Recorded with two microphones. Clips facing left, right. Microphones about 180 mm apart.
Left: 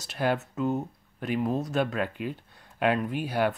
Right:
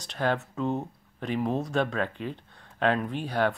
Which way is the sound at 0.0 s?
5° left (ahead or behind).